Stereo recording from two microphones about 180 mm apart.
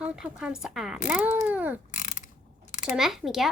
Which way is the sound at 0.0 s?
5° right (ahead or behind).